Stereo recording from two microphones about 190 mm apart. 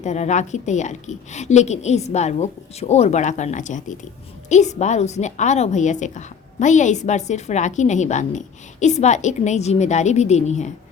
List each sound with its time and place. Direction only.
0.0 s a woman's voice: 35° left (ahead or behind)